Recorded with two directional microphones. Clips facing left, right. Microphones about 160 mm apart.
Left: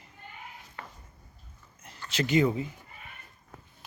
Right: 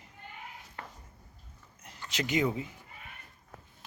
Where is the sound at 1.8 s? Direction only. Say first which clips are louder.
Left 4 dB; 15° right (ahead or behind).